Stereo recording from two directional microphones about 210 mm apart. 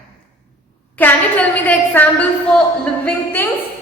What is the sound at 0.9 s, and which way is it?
A woman's voice, 10° left (ahead or behind).